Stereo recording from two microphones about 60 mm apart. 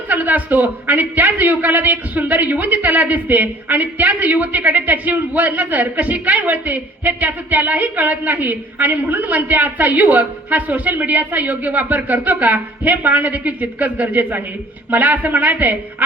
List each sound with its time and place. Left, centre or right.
0.1 s a man's voice: right